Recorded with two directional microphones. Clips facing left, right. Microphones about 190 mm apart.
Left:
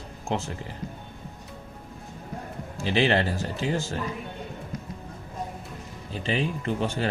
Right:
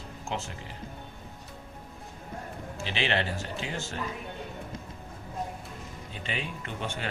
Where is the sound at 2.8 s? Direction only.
40° left (ahead or behind).